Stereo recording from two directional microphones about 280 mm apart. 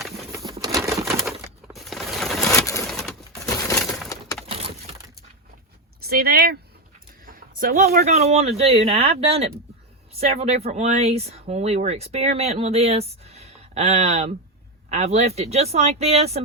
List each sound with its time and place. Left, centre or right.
0.3 s a sound: centre
0.5 s typewriter: centre
1.0 s crushing: centre
1.6 s a sound: centre
2.5 s pigeon: centre
2.8 s pigeon: centre
3.4 s crushing: centre
4.4 s crushing: right
6.1 s speech: right